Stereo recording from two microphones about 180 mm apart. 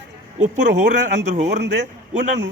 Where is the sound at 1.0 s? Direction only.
40° right (ahead or behind).